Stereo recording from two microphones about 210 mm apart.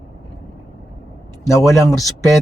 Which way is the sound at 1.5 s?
15° left (ahead or behind).